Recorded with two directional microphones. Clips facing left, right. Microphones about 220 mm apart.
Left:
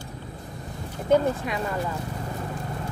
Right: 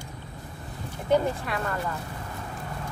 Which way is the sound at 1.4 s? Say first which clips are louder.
Left 2 dB; 15° left (ahead or behind).